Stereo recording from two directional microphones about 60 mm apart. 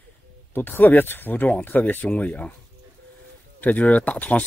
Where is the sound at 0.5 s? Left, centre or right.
Left.